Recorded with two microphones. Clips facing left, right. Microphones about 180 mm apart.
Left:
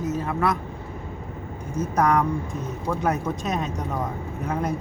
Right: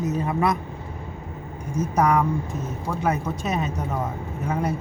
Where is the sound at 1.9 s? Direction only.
10° right (ahead or behind).